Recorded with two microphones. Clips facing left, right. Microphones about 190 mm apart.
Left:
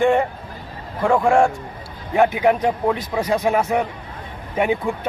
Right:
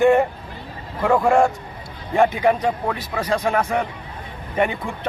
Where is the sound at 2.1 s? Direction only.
10° left (ahead or behind).